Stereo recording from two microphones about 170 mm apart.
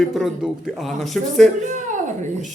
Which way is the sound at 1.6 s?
45° right (ahead or behind).